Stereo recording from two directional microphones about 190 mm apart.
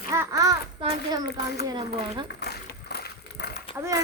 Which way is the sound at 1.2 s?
60° left (ahead or behind).